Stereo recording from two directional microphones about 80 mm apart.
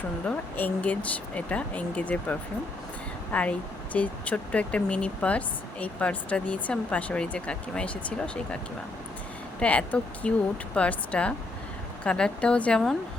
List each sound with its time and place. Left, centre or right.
0.3 s speech: centre
9.6 s speech: centre